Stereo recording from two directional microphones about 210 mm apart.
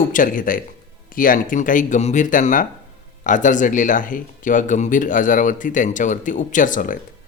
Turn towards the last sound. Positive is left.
turn(degrees=40)  # may be behind; listen again after turning